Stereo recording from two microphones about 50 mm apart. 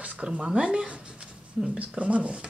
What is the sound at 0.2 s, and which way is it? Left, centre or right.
Speech, right.